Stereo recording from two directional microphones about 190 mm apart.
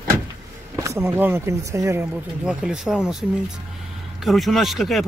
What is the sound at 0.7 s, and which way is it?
Speech, 15° right (ahead or behind).